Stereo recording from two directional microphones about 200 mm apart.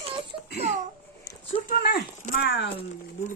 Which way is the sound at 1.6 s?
45° left (ahead or behind).